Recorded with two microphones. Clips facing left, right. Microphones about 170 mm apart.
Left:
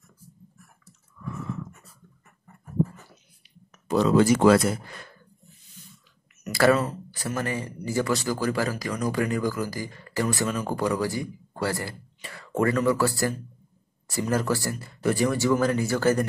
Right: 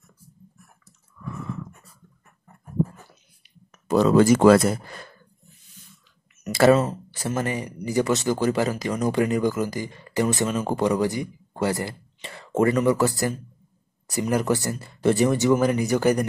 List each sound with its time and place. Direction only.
3.8 s speech: 45° right (ahead or behind)
6.4 s speech: 25° right (ahead or behind)